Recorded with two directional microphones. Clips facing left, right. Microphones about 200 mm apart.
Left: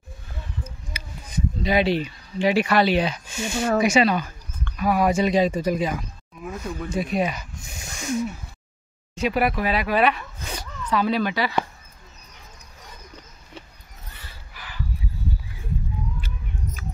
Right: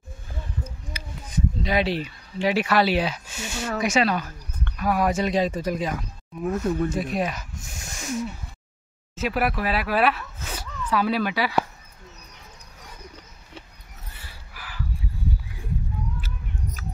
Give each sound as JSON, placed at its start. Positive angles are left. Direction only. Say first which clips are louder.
{"t": 1.3, "sound": "speech", "louder": "left 2 dB", "side_deg": 0}
{"t": 3.5, "sound": "speech", "louder": "left 7 dB", "side_deg": 50}
{"t": 3.8, "sound": "speech", "louder": "even", "side_deg": 0}
{"t": 6.9, "sound": "snake", "louder": "left 2 dB", "side_deg": 0}
{"t": 9.1, "sound": "speech", "louder": "left 2 dB", "side_deg": 0}
{"t": 14.1, "sound": "a sound", "louder": "left 1 dB", "side_deg": -5}
{"t": 16.2, "sound": "cat", "louder": "left 1 dB", "side_deg": -5}